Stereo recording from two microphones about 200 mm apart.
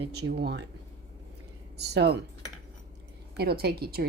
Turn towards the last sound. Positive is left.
turn(degrees=-50)  # may be behind; listen again after turning